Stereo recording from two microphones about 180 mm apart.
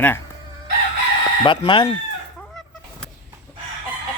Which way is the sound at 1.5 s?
30° left (ahead or behind).